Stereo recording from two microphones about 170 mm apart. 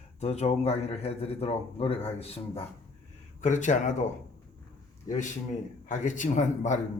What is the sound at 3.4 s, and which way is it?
Speech, 45° left (ahead or behind).